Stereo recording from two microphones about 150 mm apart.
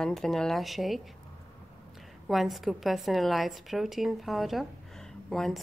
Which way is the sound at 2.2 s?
Centre (ahead or behind).